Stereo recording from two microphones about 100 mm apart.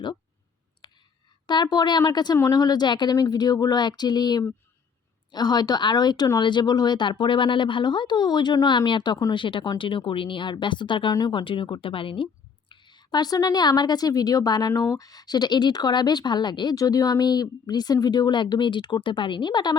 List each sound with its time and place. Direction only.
0.8 s clicking: 50° left (ahead or behind)
1.5 s speech: 45° left (ahead or behind)
9.4 s speech: 55° left (ahead or behind)